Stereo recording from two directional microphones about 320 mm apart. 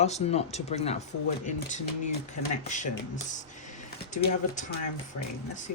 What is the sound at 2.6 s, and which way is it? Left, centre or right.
Speech, left.